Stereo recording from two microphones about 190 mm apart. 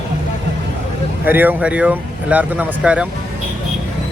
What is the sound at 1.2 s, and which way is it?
Speech, 10° right (ahead or behind).